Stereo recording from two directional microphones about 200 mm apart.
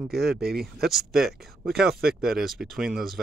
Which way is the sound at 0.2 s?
50° right (ahead or behind).